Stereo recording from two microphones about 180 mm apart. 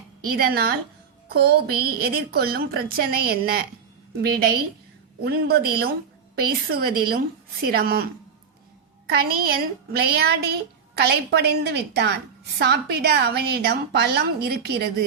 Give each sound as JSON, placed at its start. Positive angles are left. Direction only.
{"t": 0.2, "sound": "a woman's voice", "side_deg": -55}
{"t": 9.0, "sound": "a woman's voice", "side_deg": -55}